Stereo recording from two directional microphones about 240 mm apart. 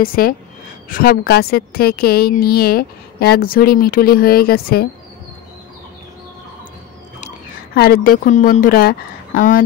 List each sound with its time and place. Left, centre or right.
0.0 s speech: left
7.7 s speech: left